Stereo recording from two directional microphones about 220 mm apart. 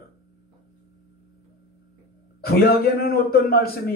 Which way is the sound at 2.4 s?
45° left (ahead or behind).